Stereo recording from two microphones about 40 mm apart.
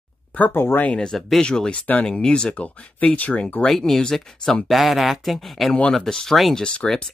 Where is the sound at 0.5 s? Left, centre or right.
Left.